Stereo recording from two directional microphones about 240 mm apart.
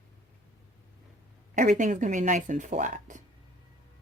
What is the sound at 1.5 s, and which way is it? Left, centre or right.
Speech, right.